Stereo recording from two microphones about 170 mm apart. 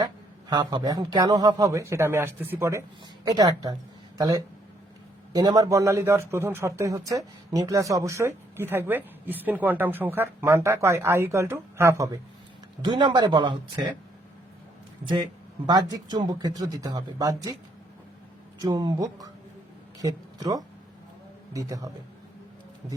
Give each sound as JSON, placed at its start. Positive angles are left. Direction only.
{"t": 0.0, "sound": "a man's voice", "side_deg": -25}
{"t": 15.0, "sound": "a man's voice", "side_deg": -25}
{"t": 18.6, "sound": "a man's voice", "side_deg": -25}